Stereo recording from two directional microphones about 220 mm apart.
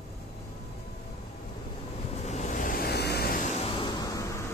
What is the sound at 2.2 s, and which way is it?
Vehicle, 30° left (ahead or behind).